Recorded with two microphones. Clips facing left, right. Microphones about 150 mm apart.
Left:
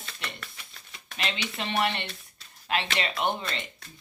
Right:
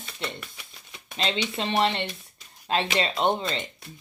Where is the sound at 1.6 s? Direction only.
25° right (ahead or behind).